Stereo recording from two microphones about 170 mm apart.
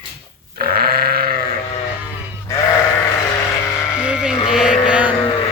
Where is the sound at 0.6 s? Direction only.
65° right (ahead or behind).